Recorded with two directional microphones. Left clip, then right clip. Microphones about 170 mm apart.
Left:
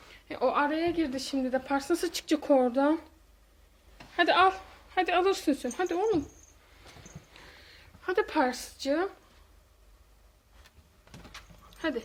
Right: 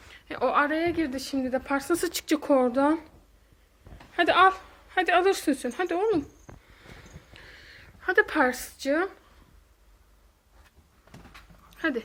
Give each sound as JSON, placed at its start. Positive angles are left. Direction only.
{"t": 0.0, "sound": "a woman's voice", "side_deg": 5}
{"t": 4.1, "sound": "a woman's voice", "side_deg": 0}
{"t": 7.3, "sound": "a sound", "side_deg": 15}
{"t": 8.0, "sound": "a woman's voice", "side_deg": 0}
{"t": 11.7, "sound": "dog", "side_deg": -10}